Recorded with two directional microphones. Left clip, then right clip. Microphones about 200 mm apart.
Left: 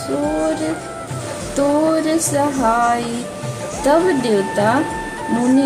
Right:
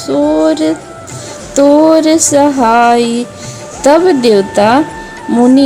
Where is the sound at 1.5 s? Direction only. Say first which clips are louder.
Right 10 dB; 35° right (ahead or behind).